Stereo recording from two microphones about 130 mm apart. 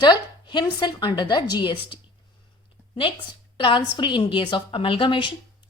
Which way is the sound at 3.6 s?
40° left (ahead or behind).